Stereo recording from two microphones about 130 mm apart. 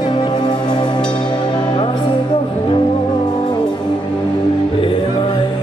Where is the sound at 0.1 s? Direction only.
35° left (ahead or behind).